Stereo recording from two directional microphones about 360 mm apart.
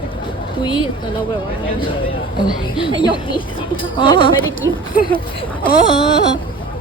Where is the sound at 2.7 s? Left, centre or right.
Centre.